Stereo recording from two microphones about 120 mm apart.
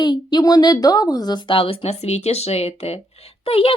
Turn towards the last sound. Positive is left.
turn(degrees=50)  # may be behind; listen again after turning